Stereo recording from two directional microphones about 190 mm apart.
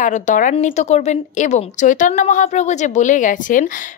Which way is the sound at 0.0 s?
40° left (ahead or behind).